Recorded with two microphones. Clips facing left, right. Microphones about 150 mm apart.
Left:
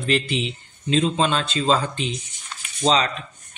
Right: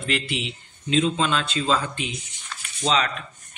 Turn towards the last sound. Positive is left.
turn(degrees=35)  # may be behind; listen again after turning